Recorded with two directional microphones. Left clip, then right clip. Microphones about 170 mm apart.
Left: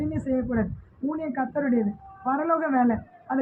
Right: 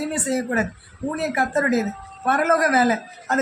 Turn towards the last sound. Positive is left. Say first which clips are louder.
# right 6 dB
turn(degrees=-40)  # may be behind; listen again after turning